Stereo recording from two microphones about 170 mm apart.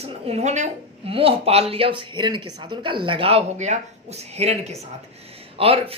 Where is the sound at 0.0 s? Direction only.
40° right (ahead or behind).